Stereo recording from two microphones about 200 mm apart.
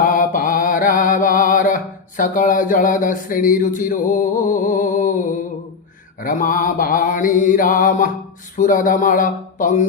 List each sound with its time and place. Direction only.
0.0 s mantra: 45° left (ahead or behind)
6.2 s mantra: 40° left (ahead or behind)